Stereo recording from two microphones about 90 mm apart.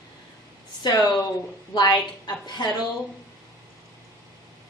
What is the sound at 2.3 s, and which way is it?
Speech, 50° left (ahead or behind).